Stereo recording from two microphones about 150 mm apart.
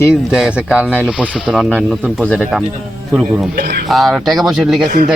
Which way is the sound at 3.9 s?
Centre (ahead or behind).